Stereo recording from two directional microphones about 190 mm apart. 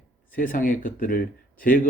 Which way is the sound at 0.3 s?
45° left (ahead or behind).